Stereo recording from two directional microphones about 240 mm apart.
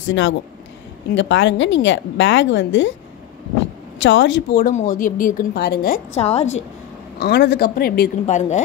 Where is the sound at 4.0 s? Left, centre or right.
Left.